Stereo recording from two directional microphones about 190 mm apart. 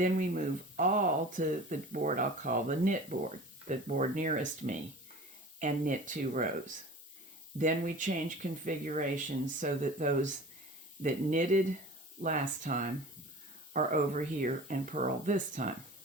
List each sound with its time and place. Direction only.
0.0 s speech: 40° right (ahead or behind)
7.6 s speech: 45° right (ahead or behind)